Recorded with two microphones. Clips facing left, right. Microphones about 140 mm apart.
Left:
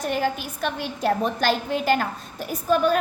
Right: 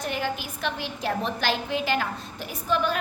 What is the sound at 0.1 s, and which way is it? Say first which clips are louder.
A woman's voice: left 5 dB; 45° left (ahead or behind).